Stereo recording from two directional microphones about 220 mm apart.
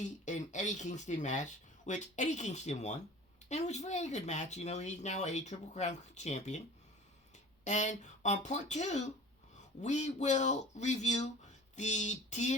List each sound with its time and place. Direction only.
0.0 s speech: 35° left (ahead or behind)
7.6 s speech: 35° left (ahead or behind)